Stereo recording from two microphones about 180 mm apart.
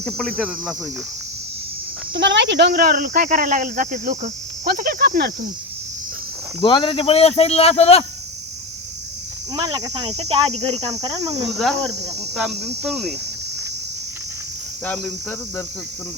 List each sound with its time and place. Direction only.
0.0 s cricket: 5° left (ahead or behind)
2.1 s speech: 80° right; by 5.5 s 60° right (ahead or behind)
6.6 s speech: 30° left (ahead or behind)
9.6 s cricket: 20° right (ahead or behind)
10.1 s cricket: 35° right (ahead or behind)
10.8 s cricket: 20° right (ahead or behind)
11.5 s cricket: centre (ahead or behind)
14.8 s cricket: 5° left (ahead or behind)